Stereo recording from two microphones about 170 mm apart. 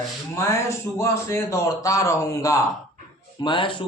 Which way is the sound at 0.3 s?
15° left (ahead or behind).